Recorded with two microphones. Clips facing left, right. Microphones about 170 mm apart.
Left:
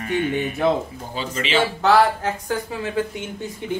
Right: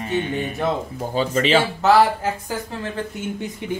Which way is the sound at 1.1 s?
45° right (ahead or behind).